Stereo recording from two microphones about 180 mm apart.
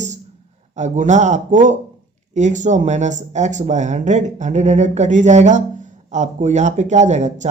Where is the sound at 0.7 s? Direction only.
40° right (ahead or behind).